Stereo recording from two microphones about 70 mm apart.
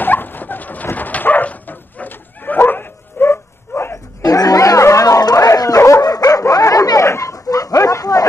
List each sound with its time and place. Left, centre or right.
0.0 s dog: left
4.2 s a sound: left
5.9 s dog: left